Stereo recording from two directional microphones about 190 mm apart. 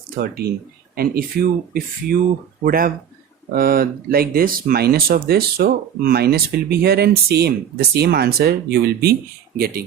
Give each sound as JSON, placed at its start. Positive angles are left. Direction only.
{"t": 0.9, "sound": "speech", "side_deg": -50}